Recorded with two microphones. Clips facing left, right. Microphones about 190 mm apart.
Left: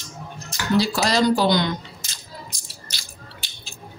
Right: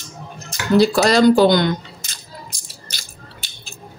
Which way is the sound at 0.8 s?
55° right (ahead or behind).